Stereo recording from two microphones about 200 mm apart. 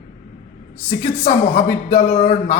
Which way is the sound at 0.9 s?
35° left (ahead or behind).